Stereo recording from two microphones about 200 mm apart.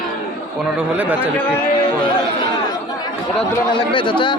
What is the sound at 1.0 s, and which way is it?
Speech, 5° right (ahead or behind).